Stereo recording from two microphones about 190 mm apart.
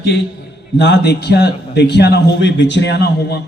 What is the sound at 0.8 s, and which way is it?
A man's voice, 60° left (ahead or behind).